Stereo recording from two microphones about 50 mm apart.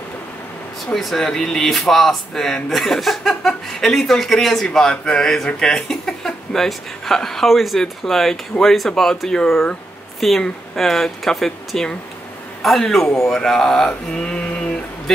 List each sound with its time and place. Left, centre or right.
0.9 s speech: centre
14.1 s mantra: centre
15.1 s speech: centre